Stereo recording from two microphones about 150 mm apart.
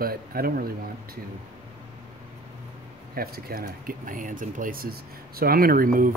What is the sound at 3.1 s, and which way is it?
Speech, 90° right.